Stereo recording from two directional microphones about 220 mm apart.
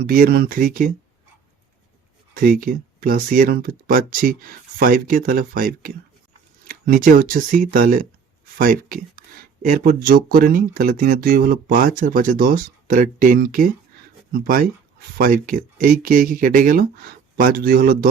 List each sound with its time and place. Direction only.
0.0 s speech: 45° right (ahead or behind)
2.3 s speech: 40° right (ahead or behind)